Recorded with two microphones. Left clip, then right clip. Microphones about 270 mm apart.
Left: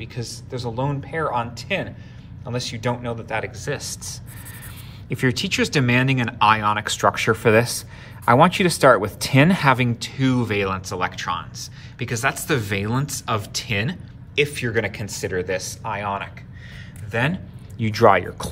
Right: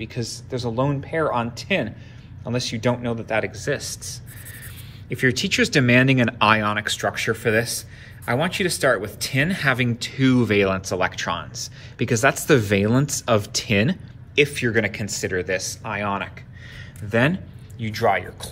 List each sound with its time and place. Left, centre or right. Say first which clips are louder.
0.0 s speech: right 3 dB; centre
17.7 s speech: left 5 dB; left